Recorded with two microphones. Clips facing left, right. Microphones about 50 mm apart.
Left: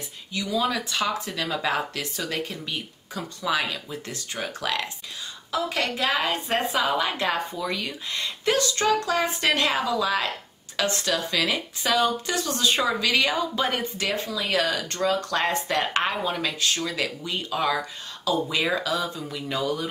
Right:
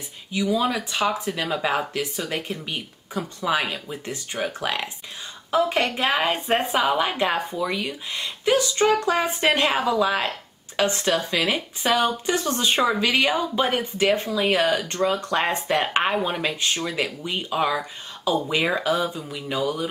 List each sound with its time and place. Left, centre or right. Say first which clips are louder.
0.3 s speech: right 3 dB; centre
5.5 s a woman's voice: right 5 dB; right
19.0 s a woman's voice: right 2 dB; centre